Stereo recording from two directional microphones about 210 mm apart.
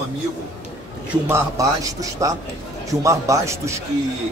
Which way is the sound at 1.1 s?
10° right (ahead or behind).